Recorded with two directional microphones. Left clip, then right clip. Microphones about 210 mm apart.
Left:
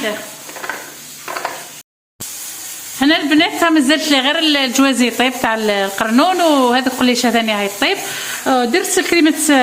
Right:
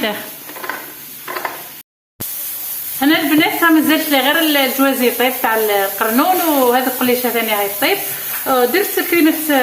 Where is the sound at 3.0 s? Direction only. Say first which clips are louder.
Even; 50° left (ahead or behind).